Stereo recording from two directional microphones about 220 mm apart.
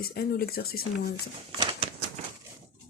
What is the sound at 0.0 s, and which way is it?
Speech, 45° left (ahead or behind).